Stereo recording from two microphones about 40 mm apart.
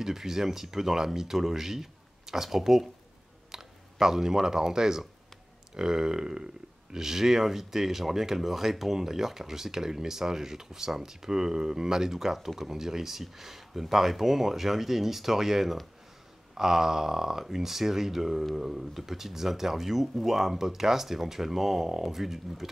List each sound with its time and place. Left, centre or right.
0.0 s speech: centre